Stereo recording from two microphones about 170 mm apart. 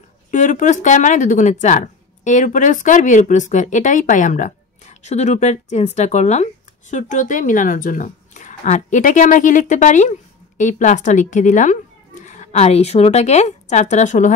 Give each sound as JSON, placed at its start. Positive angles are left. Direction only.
{"t": 0.3, "sound": "a woman's voice", "side_deg": 50}